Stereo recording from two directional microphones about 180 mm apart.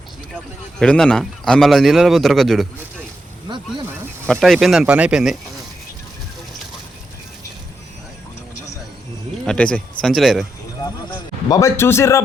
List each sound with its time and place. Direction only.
0.8 s speech: 5° left (ahead or behind)
3.5 s speech: 25° right (ahead or behind)
4.3 s speech: centre (ahead or behind)
9.4 s speech: 5° left (ahead or behind)
10.8 s a man's voice: 20° left (ahead or behind)